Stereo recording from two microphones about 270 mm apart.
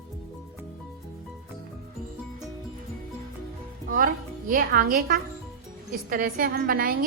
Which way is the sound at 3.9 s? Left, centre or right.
Right.